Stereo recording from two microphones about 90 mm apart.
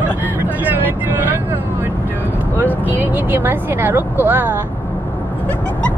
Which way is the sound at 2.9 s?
20° right (ahead or behind).